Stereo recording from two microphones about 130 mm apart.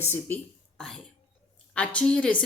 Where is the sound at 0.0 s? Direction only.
20° left (ahead or behind).